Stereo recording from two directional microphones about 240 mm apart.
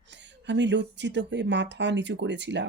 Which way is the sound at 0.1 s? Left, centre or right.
Right.